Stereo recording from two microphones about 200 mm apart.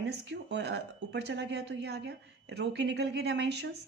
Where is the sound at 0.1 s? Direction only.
60° right (ahead or behind).